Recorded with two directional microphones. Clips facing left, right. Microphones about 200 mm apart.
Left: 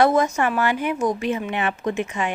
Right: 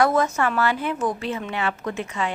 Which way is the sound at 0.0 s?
15° left (ahead or behind).